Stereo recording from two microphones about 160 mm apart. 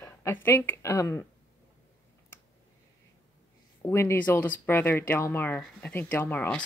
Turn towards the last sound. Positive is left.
turn(degrees=10)  # may be behind; listen again after turning